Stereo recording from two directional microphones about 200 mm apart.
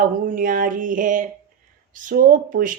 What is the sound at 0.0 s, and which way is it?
Speech, 40° right (ahead or behind).